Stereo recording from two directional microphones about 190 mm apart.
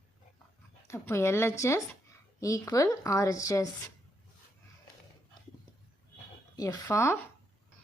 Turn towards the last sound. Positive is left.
turn(degrees=15)  # may be behind; listen again after turning